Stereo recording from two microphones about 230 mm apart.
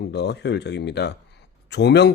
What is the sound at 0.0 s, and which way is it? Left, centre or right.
A man's voice, left.